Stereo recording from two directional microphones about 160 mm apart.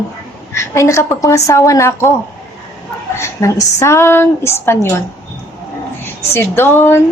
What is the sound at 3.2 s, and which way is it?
Speech, 20° left (ahead or behind).